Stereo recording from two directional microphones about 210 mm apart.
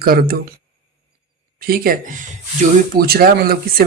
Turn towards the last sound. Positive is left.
turn(degrees=-45)  # may be behind; listen again after turning